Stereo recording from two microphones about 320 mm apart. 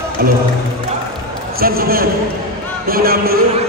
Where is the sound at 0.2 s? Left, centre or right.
Right.